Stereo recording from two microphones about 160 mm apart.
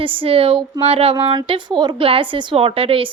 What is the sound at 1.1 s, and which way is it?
Speech, 25° right (ahead or behind).